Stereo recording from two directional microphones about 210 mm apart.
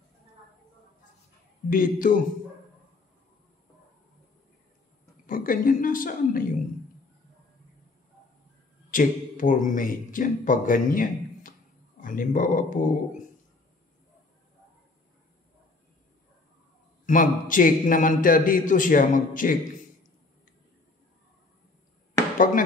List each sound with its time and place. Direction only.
1.7 s speech: 40° left (ahead or behind)
5.2 s a sound: 40° left (ahead or behind)
8.9 s speech: 40° left (ahead or behind)
17.0 s speech: 40° left (ahead or behind)